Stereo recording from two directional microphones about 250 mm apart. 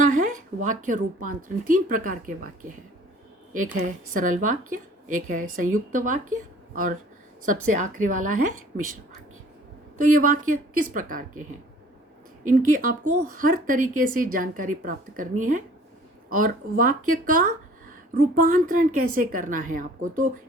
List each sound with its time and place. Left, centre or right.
0.0 s speech: right
6.3 s a sound: right
7.4 s speech: right
10.0 s speech: right
12.5 s speech: right